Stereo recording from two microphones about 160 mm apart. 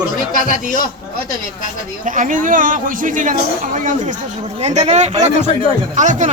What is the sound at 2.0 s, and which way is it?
Speech, 55° right (ahead or behind).